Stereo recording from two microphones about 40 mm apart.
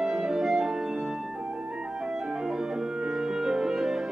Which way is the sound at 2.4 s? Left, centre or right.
Centre.